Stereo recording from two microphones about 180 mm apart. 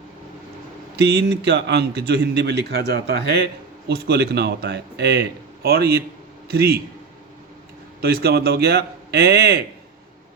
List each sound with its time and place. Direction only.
0.9 s a man's voice: 65° right (ahead or behind)
8.0 s a man's voice: 60° right (ahead or behind)